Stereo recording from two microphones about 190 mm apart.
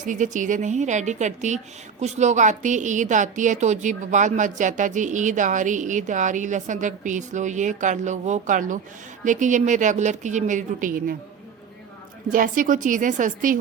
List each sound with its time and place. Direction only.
0.0 s a woman's voice: 40° right (ahead or behind)
12.3 s speech: 45° right (ahead or behind)